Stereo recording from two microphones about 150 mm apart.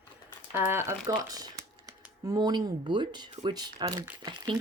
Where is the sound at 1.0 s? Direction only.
25° right (ahead or behind).